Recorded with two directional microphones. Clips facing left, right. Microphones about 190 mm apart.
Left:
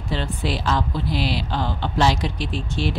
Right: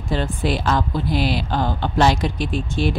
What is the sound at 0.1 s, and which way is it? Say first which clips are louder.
Speech: right 4 dB; 50° right (ahead or behind).